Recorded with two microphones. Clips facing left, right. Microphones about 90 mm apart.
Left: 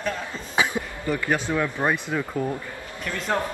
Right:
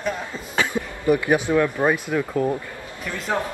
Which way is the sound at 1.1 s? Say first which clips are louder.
Right 6 dB; 15° right (ahead or behind).